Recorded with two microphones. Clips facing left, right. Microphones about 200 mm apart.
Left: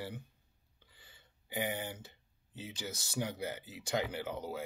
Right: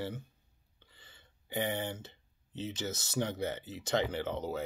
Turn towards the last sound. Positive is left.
turn(degrees=10)  # may be behind; listen again after turning